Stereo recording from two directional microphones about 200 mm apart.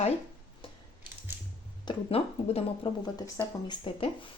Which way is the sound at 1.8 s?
30° left (ahead or behind).